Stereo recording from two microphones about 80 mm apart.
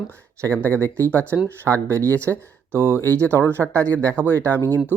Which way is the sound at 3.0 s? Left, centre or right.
Left.